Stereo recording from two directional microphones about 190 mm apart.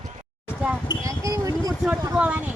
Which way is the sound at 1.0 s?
15° right (ahead or behind).